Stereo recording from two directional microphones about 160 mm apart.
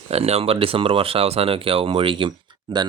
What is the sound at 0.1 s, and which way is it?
Speech, 40° right (ahead or behind).